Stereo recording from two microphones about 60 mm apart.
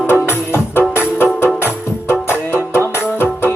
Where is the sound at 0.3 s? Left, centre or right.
Left.